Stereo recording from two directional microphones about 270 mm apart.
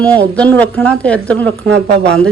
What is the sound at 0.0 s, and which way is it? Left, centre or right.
Speech, centre.